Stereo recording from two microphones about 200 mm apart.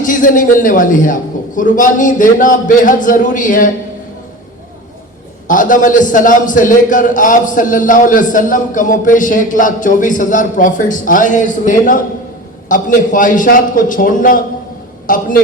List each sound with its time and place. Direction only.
0.0 s a man's voice: 40° left (ahead or behind)
5.5 s a man's voice: 40° left (ahead or behind)